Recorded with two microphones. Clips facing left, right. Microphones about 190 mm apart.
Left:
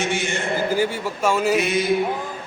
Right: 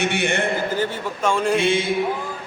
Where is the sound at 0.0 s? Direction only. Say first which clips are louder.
Right 3 dB; 60° right (ahead or behind).